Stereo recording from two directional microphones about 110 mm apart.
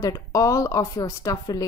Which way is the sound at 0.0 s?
30° left (ahead or behind).